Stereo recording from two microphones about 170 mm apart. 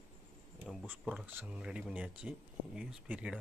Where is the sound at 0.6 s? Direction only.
5° left (ahead or behind).